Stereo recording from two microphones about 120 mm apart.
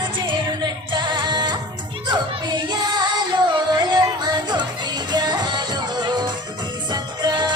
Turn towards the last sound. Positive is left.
turn(degrees=-40)  # may be behind; listen again after turning